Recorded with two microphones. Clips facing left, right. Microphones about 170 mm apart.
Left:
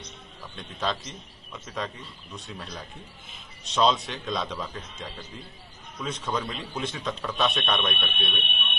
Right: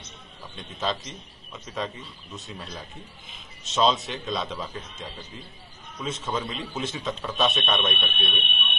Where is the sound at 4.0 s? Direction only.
Centre (ahead or behind).